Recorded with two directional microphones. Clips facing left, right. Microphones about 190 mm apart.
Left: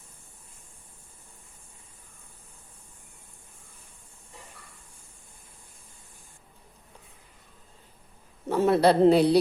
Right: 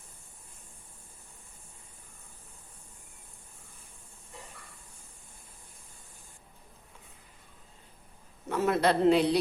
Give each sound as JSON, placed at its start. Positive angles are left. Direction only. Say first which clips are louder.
{"t": 8.4, "sound": "a man's voice", "louder": "left 6 dB", "side_deg": 30}